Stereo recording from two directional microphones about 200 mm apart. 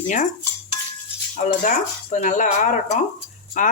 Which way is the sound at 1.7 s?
40° left (ahead or behind).